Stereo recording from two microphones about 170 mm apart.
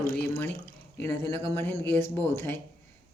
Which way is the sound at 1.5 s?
15° left (ahead or behind).